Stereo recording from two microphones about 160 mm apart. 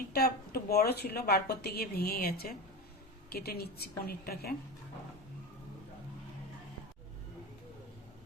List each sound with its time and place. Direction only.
0.1 s a woman's voice: 75° left (ahead or behind)